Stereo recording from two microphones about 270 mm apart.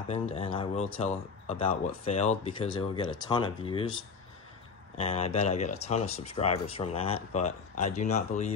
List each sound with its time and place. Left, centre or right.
0.1 s speech: left
4.9 s speech: left